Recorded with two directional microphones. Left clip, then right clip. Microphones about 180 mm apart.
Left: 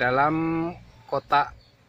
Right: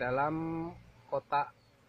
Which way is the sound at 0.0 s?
15° left (ahead or behind).